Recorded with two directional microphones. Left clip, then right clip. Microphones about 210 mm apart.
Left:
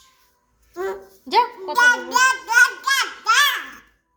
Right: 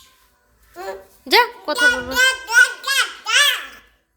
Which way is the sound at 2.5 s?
25° right (ahead or behind).